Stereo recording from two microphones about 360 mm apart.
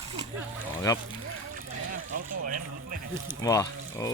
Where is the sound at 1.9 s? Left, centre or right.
Right.